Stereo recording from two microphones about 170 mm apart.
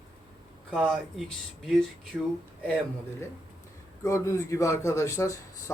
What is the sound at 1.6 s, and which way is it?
Speech, centre (ahead or behind).